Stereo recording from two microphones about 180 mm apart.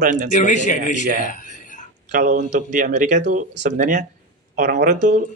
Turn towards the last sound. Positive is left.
turn(degrees=-45)  # may be behind; listen again after turning